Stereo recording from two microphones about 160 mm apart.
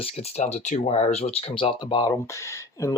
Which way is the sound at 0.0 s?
40° left (ahead or behind).